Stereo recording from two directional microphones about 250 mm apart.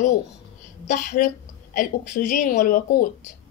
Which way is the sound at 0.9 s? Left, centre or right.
Left.